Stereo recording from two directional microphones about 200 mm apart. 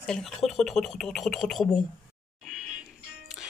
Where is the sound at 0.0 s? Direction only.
Centre (ahead or behind).